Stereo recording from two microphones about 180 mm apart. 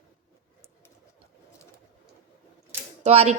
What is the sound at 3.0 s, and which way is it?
Speech, 35° right (ahead or behind).